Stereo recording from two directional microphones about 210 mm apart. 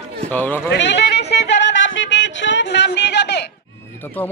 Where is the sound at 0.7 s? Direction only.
55° left (ahead or behind).